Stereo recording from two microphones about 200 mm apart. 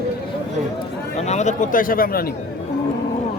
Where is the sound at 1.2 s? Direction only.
35° left (ahead or behind).